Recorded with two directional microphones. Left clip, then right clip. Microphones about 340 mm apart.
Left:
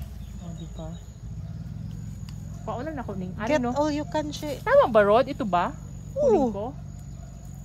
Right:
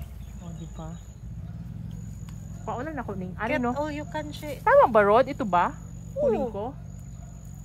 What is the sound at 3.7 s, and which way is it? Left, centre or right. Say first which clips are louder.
Speech: left 5 dB; centre.